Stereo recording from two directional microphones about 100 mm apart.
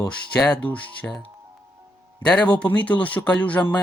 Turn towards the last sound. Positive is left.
turn(degrees=15)  # may be behind; listen again after turning